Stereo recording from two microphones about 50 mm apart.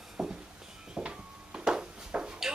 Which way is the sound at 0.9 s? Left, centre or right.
Centre.